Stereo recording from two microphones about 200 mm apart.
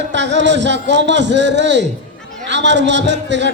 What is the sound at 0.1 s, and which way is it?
A man's voice, 60° right (ahead or behind).